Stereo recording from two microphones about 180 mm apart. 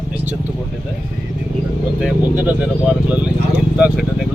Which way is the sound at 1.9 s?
5° right (ahead or behind).